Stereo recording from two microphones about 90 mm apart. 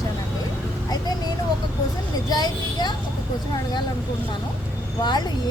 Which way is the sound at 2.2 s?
50° left (ahead or behind).